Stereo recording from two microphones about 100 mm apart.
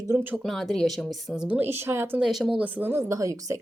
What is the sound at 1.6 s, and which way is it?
Speech, 25° right (ahead or behind).